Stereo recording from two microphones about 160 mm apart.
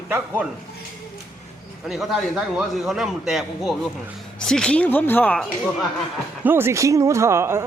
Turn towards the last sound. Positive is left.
turn(degrees=-15)  # may be behind; listen again after turning